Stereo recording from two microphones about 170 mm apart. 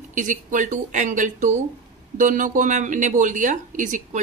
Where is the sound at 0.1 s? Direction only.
50° right (ahead or behind).